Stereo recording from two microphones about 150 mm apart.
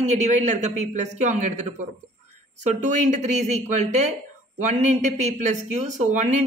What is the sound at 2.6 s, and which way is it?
Speech, 50° right (ahead or behind).